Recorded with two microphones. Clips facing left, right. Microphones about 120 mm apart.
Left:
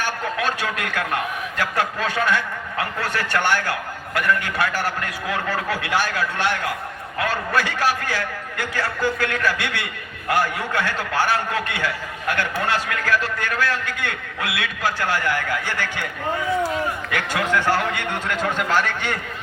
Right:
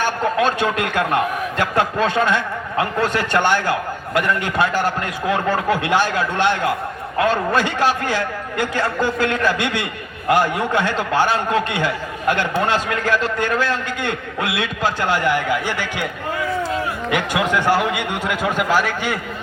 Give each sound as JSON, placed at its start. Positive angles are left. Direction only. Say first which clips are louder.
{"t": 0.0, "sound": "a man's voice", "louder": "right 6 dB", "side_deg": -25}
{"t": 17.1, "sound": "a man's voice", "louder": "right 6 dB", "side_deg": -15}